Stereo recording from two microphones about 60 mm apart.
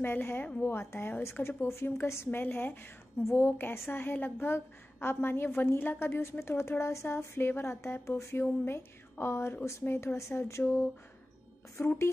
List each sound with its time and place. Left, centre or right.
0.0 s a woman's voice: left